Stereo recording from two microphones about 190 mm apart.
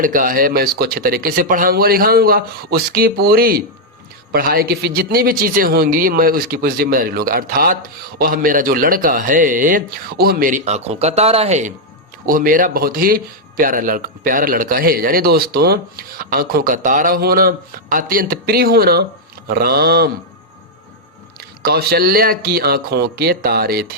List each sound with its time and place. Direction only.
0.0 s speech: 45° right (ahead or behind)
12.2 s speech: 50° right (ahead or behind)
19.5 s a sound: 55° right (ahead or behind)
21.6 s speech: 55° right (ahead or behind)